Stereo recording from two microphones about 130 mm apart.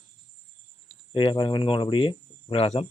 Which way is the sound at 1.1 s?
40° left (ahead or behind).